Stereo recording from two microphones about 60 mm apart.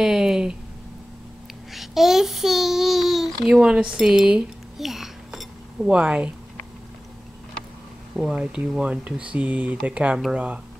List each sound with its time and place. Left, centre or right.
0.0 s a sound: centre
1.7 s child singing: centre
3.4 s a child's voice: centre
8.2 s speech: centre